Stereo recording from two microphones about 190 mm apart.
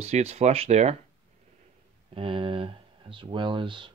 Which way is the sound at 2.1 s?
30° right (ahead or behind).